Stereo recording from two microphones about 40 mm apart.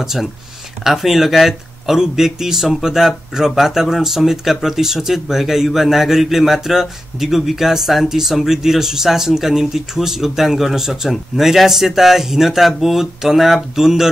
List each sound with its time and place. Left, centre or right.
0.0 s speech: centre